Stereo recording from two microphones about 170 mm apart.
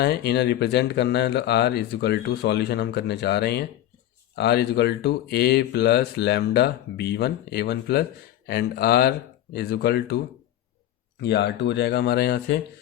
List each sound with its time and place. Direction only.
0.0 s speech: 75° left (ahead or behind)
11.2 s speech: 80° left